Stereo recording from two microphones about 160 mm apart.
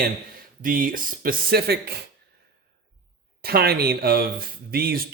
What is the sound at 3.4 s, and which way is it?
Speech, 75° right (ahead or behind).